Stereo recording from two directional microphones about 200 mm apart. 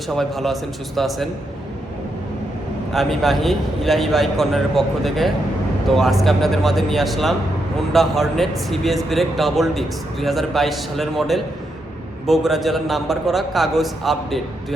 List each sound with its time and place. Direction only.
0.1 s a man's voice: centre (ahead or behind)
2.9 s a man's voice: centre (ahead or behind)